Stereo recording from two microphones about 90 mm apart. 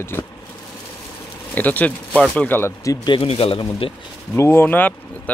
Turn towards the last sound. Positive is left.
turn(degrees=20)  # may be behind; listen again after turning